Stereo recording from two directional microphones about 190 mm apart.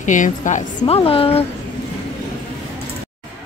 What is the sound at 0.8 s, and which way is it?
Speech, 30° left (ahead or behind).